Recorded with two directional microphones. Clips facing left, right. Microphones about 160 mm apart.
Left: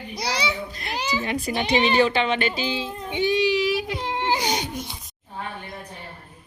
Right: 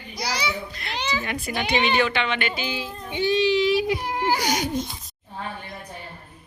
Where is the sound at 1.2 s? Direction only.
35° left (ahead or behind); by 3.8 s 5° left (ahead or behind).